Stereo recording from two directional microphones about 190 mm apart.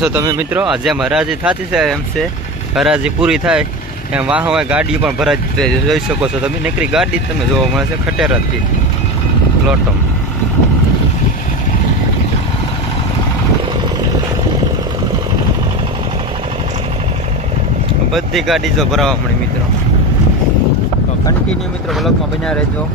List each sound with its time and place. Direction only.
0.0 s speech: 10° right (ahead or behind)
18.1 s speech: centre (ahead or behind)